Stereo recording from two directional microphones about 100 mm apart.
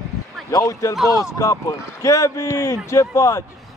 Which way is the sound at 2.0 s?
30° left (ahead or behind).